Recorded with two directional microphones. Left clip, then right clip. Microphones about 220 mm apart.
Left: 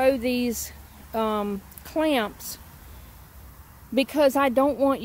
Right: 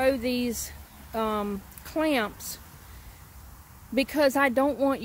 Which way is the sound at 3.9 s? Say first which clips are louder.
Left 3 dB; 15° left (ahead or behind).